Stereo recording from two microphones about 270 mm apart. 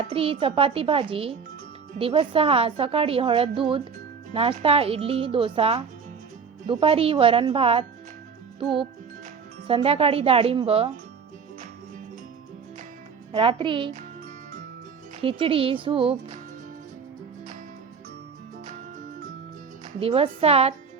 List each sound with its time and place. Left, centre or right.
0.0 s a woman's voice: right
13.3 s a woman's voice: centre
15.2 s a woman's voice: centre
20.0 s a woman's voice: right